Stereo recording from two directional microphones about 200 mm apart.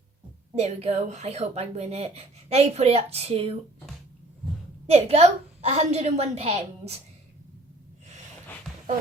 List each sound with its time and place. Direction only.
0.5 s speech: 30° right (ahead or behind)
4.9 s speech: 30° right (ahead or behind)